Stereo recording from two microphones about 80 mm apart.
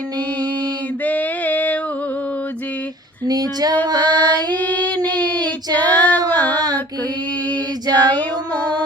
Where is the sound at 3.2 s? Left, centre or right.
Right.